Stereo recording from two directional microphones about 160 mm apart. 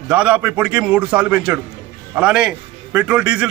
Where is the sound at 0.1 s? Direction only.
10° right (ahead or behind).